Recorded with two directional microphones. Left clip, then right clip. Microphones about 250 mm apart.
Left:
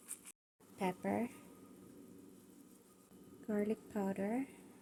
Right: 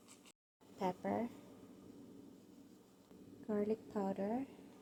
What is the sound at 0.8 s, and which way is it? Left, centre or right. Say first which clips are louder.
Speech: left 1 dB; left.